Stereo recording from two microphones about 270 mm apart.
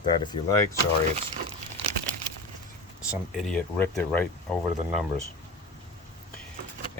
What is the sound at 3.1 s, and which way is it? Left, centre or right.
Speech, centre.